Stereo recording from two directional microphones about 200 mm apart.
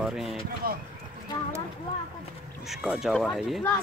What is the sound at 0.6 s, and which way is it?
Speech, 50° right (ahead or behind).